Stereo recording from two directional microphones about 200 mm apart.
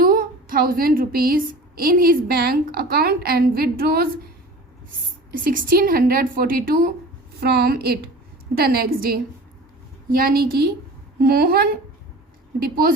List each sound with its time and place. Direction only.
0.0 s a woman's voice: 45° right (ahead or behind)
5.3 s a woman's voice: 45° right (ahead or behind)